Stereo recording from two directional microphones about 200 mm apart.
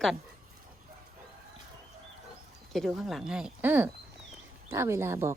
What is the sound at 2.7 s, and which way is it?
A woman's voice, centre (ahead or behind).